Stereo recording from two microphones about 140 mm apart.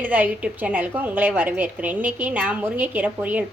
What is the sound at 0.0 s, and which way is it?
A woman's voice, 10° right (ahead or behind).